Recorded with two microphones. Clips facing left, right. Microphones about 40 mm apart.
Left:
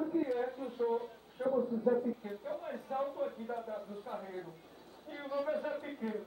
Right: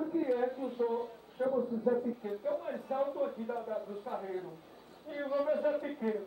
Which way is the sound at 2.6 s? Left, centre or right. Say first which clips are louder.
Right 3 dB; centre.